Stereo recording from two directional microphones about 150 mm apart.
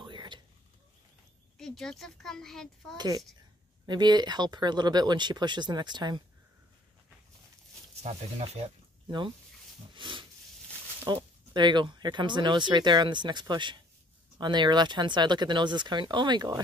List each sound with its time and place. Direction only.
0.0 s whispering: 30° right (ahead or behind)
1.6 s a child's voice: 5° left (ahead or behind)
3.0 s speech: 25° right (ahead or behind)
8.0 s speech: 45° right (ahead or behind)
9.9 s speech: 35° right (ahead or behind)